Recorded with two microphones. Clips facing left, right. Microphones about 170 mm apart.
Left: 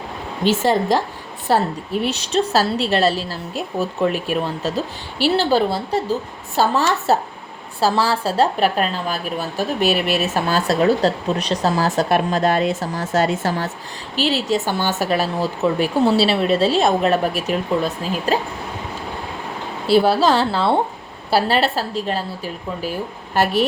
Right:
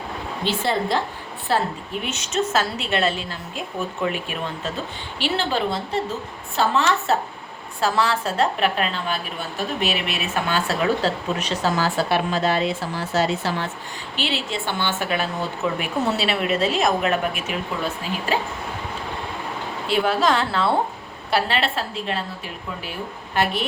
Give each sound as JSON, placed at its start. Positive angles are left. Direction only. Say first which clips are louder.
{"t": 0.4, "sound": "a woman's voice", "louder": "left 6 dB", "side_deg": 45}
{"t": 19.9, "sound": "a woman's voice", "louder": "left 5 dB", "side_deg": 35}